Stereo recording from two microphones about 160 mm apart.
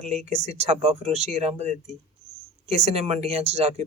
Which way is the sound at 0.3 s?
45° right (ahead or behind).